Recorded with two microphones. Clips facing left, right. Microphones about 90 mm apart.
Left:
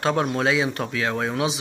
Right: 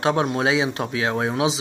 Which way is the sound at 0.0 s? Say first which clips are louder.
Right 1 dB; 20° right (ahead or behind).